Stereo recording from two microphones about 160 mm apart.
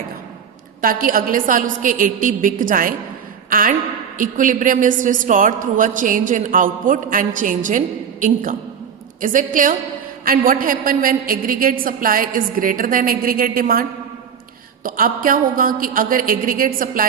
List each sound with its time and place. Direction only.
0.8 s a woman's voice: 60° right (ahead or behind)
14.8 s a woman's voice: 60° right (ahead or behind)